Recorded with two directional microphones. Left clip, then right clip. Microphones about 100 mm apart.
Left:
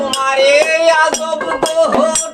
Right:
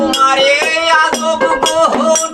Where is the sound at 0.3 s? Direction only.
35° left (ahead or behind).